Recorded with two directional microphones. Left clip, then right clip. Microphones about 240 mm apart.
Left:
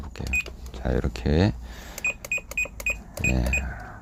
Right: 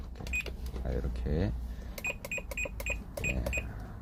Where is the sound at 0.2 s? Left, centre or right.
Left.